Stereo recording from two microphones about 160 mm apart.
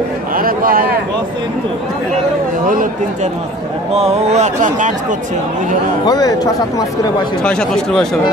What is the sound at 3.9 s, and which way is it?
Speech, 45° right (ahead or behind).